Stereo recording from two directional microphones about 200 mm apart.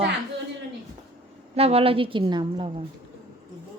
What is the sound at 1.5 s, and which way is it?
A woman's voice, 30° right (ahead or behind).